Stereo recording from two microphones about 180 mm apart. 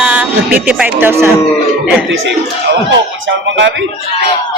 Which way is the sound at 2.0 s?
85° right.